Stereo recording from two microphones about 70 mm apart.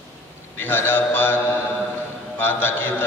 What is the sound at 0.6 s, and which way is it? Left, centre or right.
Mantra, left.